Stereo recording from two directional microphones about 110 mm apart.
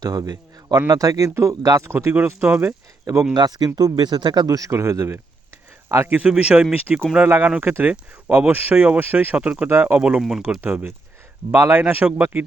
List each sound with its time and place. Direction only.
0.0 s speech: 35° right (ahead or behind); by 2.7 s 15° right (ahead or behind)
3.3 s speech: 35° right (ahead or behind)
4.4 s speech: 30° right (ahead or behind)
6.1 s speech: 10° right (ahead or behind)
10.6 s speech: 15° right (ahead or behind)